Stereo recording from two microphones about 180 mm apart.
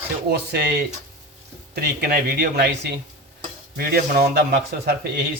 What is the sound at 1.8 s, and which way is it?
Speech, 60° right (ahead or behind).